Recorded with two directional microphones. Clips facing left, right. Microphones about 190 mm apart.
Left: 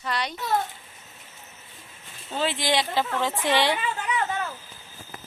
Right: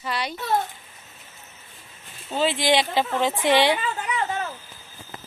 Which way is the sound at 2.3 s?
15° right (ahead or behind).